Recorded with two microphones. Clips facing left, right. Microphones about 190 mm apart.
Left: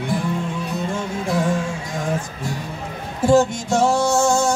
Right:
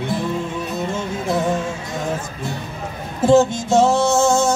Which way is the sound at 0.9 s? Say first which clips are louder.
Right 1 dB; 25° right (ahead or behind).